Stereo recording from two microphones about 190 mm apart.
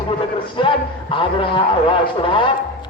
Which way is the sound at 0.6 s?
25° left (ahead or behind).